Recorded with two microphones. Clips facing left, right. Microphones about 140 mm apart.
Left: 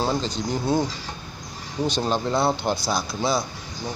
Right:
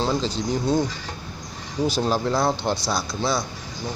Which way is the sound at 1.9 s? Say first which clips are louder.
Right 1 dB; 5° right (ahead or behind).